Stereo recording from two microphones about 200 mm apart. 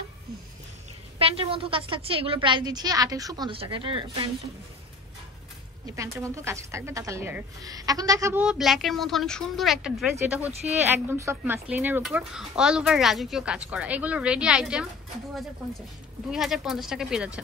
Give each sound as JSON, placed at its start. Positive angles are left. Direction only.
{"t": 1.1, "sound": "a woman's voice", "side_deg": -25}
{"t": 5.9, "sound": "a woman's voice", "side_deg": -15}
{"t": 10.5, "sound": "speech", "side_deg": -30}
{"t": 10.9, "sound": "speech", "side_deg": -10}
{"t": 16.3, "sound": "speech", "side_deg": 0}